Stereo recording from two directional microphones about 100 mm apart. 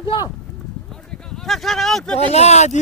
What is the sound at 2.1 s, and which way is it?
Speech, 90° left.